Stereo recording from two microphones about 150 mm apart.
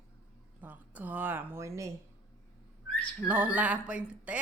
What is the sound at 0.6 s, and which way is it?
Speech, 10° right (ahead or behind).